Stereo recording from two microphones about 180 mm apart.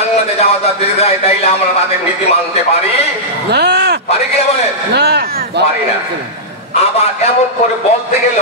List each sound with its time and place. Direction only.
0.4 s a man's voice: 35° left (ahead or behind)
3.4 s a sound: 65° right (ahead or behind)
4.9 s speech: 65° right (ahead or behind)